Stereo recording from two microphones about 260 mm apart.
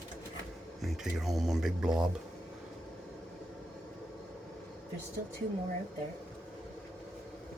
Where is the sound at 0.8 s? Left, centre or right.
Centre.